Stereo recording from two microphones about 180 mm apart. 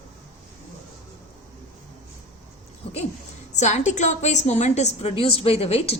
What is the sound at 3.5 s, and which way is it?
A woman's voice, 40° left (ahead or behind).